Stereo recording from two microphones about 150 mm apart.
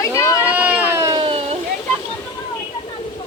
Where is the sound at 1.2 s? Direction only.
40° right (ahead or behind).